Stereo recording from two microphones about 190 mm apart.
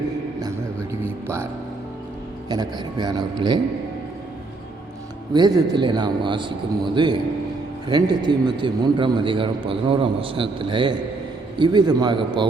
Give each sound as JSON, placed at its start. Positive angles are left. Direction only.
{"t": 2.5, "sound": "a man's voice", "side_deg": -20}
{"t": 5.3, "sound": "a man's voice", "side_deg": -20}